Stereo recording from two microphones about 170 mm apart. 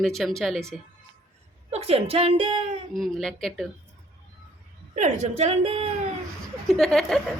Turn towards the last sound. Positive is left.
turn(degrees=5)  # may be behind; listen again after turning